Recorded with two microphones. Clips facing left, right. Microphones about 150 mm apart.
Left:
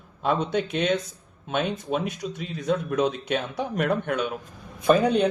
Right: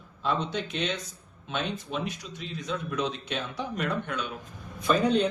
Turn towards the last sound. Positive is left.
turn(degrees=55)  # may be behind; listen again after turning